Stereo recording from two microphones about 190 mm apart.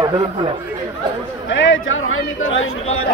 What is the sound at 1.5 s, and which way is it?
A man's voice, 85° left.